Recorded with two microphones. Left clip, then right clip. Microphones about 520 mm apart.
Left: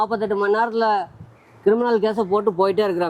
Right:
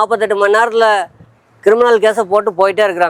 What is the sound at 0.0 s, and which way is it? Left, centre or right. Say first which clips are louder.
Speech: right 8 dB; right.